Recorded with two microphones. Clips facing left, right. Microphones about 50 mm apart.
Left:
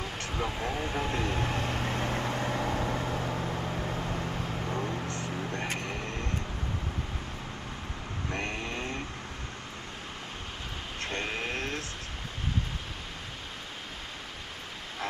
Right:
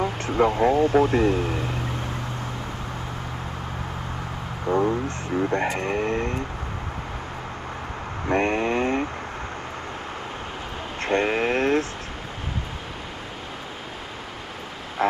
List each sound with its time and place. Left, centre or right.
0.0 s vehicle: right
0.9 s speech: right
4.6 s speech: right
8.3 s speech: right
11.0 s vehicle: right
15.0 s vehicle: right